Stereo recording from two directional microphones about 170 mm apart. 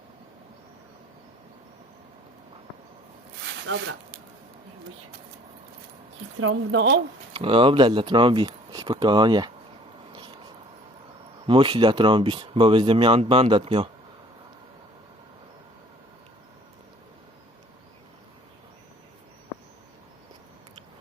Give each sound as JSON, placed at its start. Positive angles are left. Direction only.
{"t": 3.7, "sound": "speech", "side_deg": -90}
{"t": 6.7, "sound": "speech", "side_deg": -90}
{"t": 7.3, "sound": "speech", "side_deg": -30}
{"t": 11.4, "sound": "speech", "side_deg": -30}